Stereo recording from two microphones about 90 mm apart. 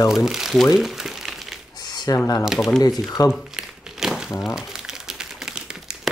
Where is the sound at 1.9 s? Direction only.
50° left (ahead or behind).